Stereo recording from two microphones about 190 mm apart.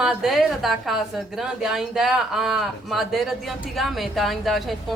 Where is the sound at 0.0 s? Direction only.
Centre (ahead or behind).